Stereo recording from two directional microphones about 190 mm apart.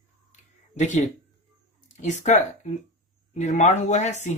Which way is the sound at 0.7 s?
40° left (ahead or behind).